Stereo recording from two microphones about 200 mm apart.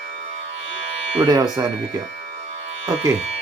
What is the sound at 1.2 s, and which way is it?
Speech, 20° right (ahead or behind).